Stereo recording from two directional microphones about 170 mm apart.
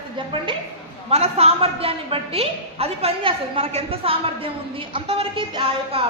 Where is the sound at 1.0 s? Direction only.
35° right (ahead or behind).